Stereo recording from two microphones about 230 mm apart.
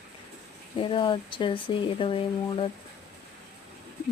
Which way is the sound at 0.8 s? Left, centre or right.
Left.